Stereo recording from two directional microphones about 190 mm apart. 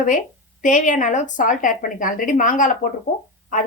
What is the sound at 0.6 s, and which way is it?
A woman's voice, 40° left (ahead or behind).